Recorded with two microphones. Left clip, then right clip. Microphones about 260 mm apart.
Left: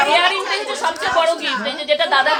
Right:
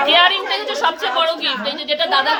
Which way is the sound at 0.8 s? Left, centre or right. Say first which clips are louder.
Even; centre.